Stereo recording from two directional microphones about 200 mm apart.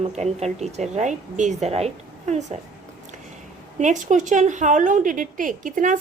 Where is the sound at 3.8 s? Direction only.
40° right (ahead or behind).